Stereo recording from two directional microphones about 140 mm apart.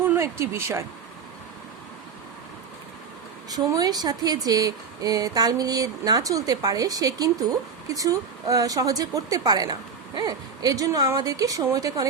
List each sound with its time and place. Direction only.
0.0 s speech: 15° right (ahead or behind)
3.5 s speech: 25° right (ahead or behind)